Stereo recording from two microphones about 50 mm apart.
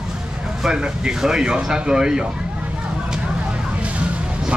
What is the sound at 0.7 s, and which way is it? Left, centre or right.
A man's voice, centre.